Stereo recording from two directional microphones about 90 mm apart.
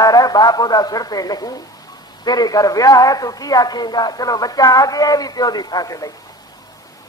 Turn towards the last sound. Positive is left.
turn(degrees=40)  # may be behind; listen again after turning